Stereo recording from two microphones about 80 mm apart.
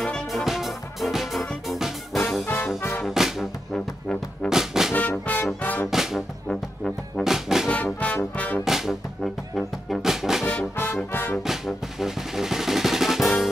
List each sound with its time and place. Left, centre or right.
0.0 s music: centre
2.4 s music: left
3.1 s music: centre
3.7 s music: centre
4.5 s brass instrument: centre
4.9 s music: centre
5.9 s music: centre
7.2 s brass instrument: centre
7.7 s trombone: centre
8.4 s brass instrument: centre
8.6 s brass instrument: centre
10.4 s music: centre
11.4 s music: centre